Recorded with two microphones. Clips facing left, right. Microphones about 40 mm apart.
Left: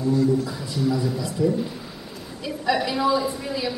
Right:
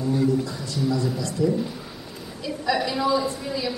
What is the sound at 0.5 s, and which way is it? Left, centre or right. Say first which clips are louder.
A man's voice: left 1 dB; centre.